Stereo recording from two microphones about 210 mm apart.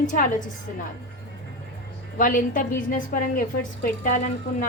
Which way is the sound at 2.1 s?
40° left (ahead or behind).